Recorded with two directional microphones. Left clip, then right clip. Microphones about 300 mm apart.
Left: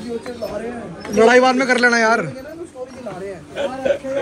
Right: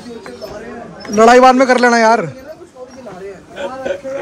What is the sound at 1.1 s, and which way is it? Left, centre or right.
A man's voice, right.